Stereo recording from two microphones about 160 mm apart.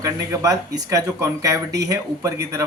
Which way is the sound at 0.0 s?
20° right (ahead or behind).